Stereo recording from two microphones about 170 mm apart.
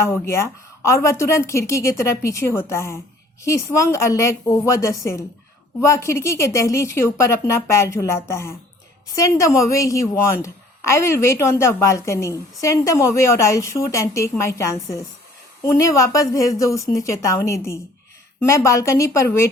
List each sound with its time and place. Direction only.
0.1 s a woman's voice: 15° left (ahead or behind)